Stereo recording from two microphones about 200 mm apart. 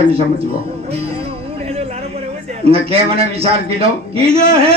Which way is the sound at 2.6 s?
30° right (ahead or behind).